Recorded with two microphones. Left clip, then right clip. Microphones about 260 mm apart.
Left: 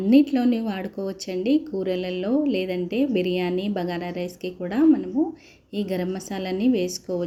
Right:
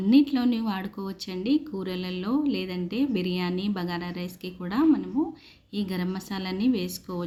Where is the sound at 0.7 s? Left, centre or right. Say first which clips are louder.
Left 4 dB; centre.